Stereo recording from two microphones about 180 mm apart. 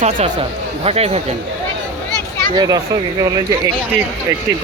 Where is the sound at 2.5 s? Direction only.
20° right (ahead or behind).